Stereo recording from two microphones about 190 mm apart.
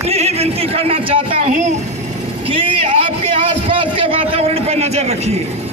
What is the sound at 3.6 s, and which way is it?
A man's voice, 30° right (ahead or behind).